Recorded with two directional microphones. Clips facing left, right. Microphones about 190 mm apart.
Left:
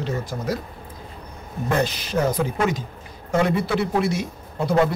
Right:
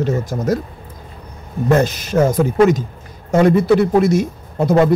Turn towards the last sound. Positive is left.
turn(degrees=-45)  # may be behind; listen again after turning